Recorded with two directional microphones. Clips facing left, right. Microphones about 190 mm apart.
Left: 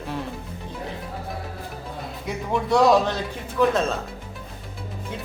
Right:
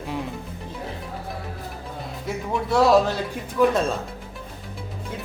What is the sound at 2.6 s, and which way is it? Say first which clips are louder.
A man's voice: even; 5° right (ahead or behind).